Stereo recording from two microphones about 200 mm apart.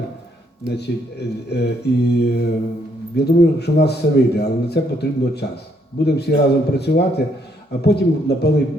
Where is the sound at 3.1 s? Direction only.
55° left (ahead or behind).